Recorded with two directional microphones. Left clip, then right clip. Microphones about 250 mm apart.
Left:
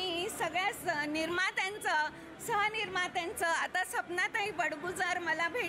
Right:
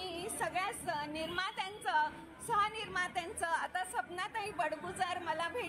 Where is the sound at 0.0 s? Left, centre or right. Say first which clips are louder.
Left 4 dB; left.